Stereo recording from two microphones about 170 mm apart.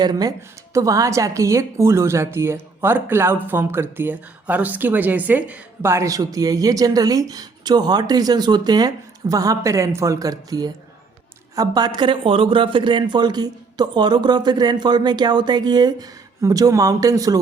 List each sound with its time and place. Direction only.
0.0 s speech: 25° right (ahead or behind)